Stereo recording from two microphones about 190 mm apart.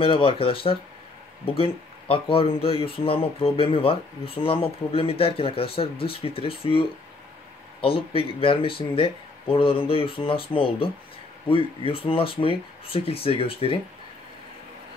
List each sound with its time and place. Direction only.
0.0 s speech: 30° left (ahead or behind)